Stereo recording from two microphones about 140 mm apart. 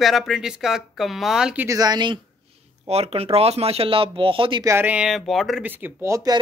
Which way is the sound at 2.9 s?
45° right (ahead or behind).